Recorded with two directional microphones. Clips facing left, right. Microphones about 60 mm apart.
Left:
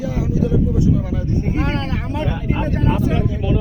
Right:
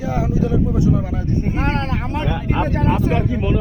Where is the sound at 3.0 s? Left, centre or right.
Right.